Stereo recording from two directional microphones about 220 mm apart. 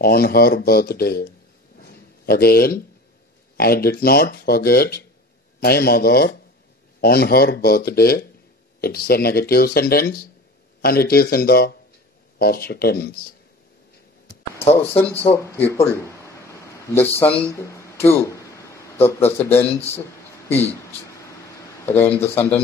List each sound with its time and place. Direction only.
0.0 s speech: 45° left (ahead or behind)
1.8 s a sound: 45° left (ahead or behind)
3.5 s speech: 45° left (ahead or behind)
14.6 s speech: 30° left (ahead or behind)
15.3 s a sound: 10° left (ahead or behind)
17.2 s speech: 10° left (ahead or behind)
21.8 s speech: 10° left (ahead or behind)